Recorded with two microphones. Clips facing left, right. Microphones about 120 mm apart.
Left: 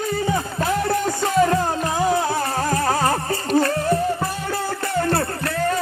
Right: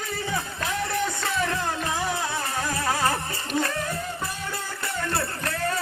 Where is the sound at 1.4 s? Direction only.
35° left (ahead or behind).